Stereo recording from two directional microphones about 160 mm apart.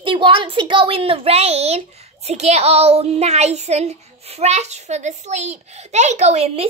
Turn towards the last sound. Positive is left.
turn(degrees=-40)  # may be behind; listen again after turning